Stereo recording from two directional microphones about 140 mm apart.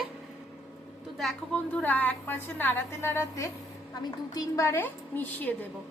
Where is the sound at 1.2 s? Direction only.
5° left (ahead or behind).